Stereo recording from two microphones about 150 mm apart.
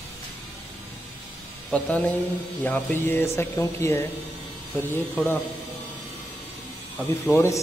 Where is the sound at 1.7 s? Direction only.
10° left (ahead or behind).